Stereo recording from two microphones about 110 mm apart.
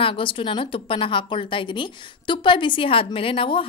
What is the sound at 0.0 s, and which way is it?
A woman's voice, 50° left (ahead or behind).